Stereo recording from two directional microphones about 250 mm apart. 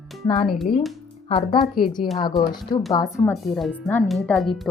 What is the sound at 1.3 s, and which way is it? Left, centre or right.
Speech, left.